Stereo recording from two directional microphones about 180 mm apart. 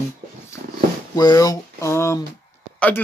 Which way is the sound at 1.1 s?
20° left (ahead or behind).